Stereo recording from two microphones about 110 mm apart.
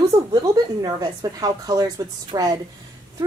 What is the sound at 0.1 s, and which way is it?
A woman's voice, 35° right (ahead or behind).